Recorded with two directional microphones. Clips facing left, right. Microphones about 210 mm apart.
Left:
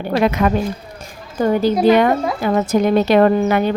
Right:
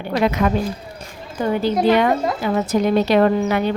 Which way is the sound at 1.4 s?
40° left (ahead or behind).